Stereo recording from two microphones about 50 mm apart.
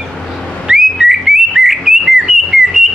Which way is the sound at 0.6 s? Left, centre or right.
Centre.